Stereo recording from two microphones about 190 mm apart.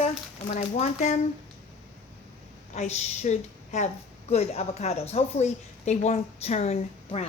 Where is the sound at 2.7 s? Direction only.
35° left (ahead or behind).